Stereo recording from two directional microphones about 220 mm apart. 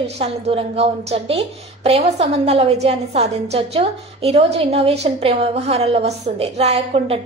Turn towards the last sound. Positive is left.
turn(degrees=-25)  # may be behind; listen again after turning